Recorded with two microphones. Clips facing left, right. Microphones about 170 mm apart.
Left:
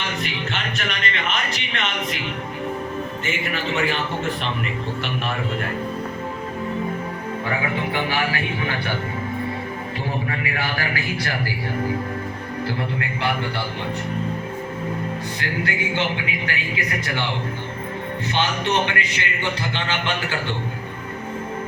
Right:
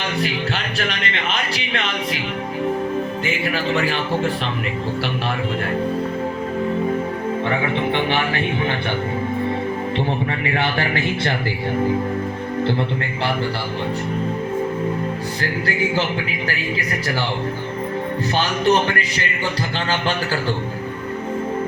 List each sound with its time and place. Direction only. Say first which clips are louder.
0.2 s music: right 5 dB; 35° right (ahead or behind)
3.2 s a man's voice: right 2 dB; 35° right (ahead or behind)
8.1 s speech: right 3 dB; 25° right (ahead or behind)
10.4 s speech: right 5 dB; 25° right (ahead or behind)
18.3 s a man's voice: right 4 dB; 35° right (ahead or behind)